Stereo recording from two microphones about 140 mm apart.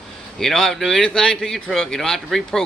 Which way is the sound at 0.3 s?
5° left (ahead or behind).